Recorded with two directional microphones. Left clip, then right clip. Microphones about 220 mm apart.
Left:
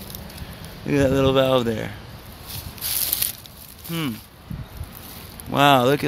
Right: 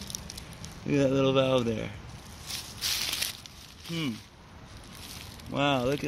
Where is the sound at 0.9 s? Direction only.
Centre (ahead or behind).